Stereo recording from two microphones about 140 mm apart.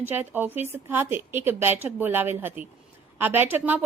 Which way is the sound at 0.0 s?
15° right (ahead or behind).